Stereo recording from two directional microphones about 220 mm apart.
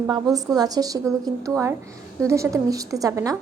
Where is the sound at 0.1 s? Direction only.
15° right (ahead or behind).